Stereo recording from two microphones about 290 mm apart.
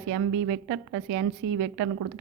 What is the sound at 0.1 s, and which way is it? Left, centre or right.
A woman's voice, right.